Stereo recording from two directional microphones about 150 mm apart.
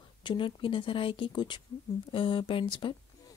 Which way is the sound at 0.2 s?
35° left (ahead or behind).